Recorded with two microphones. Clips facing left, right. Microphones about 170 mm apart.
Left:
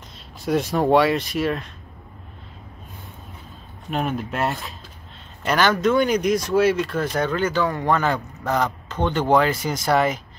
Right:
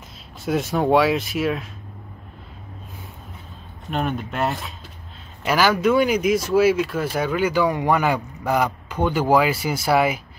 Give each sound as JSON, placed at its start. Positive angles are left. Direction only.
{"t": 0.5, "sound": "speech", "side_deg": 0}
{"t": 3.9, "sound": "speech", "side_deg": 0}